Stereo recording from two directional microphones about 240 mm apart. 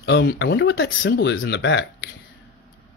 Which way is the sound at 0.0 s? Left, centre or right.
Left.